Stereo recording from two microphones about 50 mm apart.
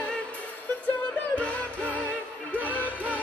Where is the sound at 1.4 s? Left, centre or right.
Left.